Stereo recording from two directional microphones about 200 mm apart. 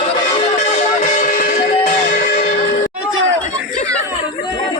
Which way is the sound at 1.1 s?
45° left (ahead or behind).